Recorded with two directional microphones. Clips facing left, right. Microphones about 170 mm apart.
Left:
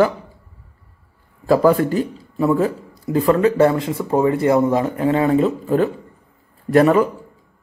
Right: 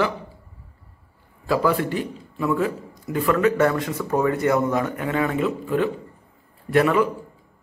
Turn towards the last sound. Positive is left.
turn(degrees=40)  # may be behind; listen again after turning